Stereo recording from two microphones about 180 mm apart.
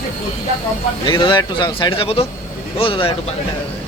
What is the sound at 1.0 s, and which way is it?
A man's voice, 25° left (ahead or behind).